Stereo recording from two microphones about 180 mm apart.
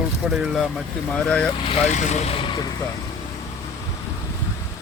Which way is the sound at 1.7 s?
40° left (ahead or behind).